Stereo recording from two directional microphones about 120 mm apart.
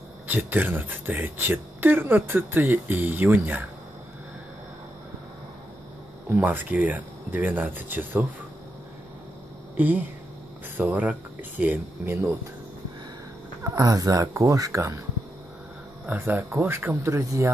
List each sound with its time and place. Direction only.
0.3 s speech: 15° right (ahead or behind)
6.2 s speech: 15° right (ahead or behind)
9.8 s speech: 15° right (ahead or behind)
13.7 s speech: 30° right (ahead or behind)
16.1 s speech: 15° right (ahead or behind)